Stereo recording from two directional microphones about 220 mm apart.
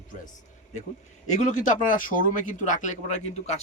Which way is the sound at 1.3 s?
35° left (ahead or behind).